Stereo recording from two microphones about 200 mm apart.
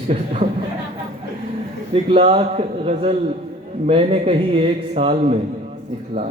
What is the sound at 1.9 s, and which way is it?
A man's voice, 30° right (ahead or behind).